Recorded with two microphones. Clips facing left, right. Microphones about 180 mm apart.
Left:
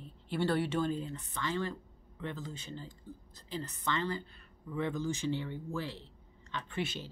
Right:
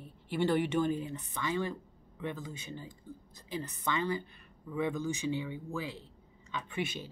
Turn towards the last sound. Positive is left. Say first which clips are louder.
# right 1 dB
turn(degrees=-15)  # may be behind; listen again after turning